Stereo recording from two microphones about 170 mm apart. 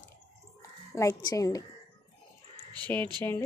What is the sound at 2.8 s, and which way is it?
Speech, 10° left (ahead or behind).